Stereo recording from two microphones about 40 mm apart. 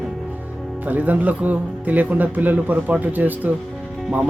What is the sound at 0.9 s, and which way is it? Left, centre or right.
Speech, right.